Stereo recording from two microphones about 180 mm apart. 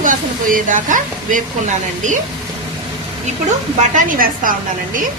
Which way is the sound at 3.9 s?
50° right (ahead or behind).